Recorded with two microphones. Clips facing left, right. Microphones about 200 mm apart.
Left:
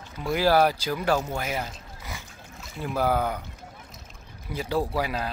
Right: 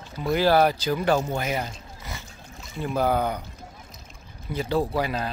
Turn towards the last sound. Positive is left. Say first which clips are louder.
# right 2 dB
turn(degrees=5)  # may be behind; listen again after turning